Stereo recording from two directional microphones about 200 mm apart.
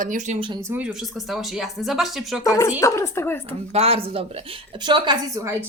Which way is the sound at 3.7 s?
30° right (ahead or behind).